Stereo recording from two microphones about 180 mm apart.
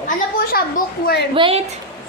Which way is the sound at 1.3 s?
30° right (ahead or behind).